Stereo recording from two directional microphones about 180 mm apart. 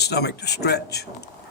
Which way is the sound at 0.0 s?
65° left (ahead or behind).